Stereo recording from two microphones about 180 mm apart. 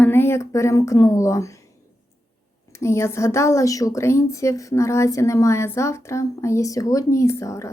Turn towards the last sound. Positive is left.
turn(degrees=15)  # may be behind; listen again after turning